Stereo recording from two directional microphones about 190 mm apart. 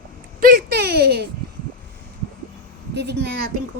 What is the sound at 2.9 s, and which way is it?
Speech, 60° right (ahead or behind).